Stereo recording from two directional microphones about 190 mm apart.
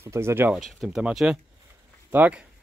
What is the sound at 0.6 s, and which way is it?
Speech, centre (ahead or behind).